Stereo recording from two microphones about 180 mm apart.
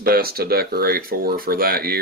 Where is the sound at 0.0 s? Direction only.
55° right (ahead or behind).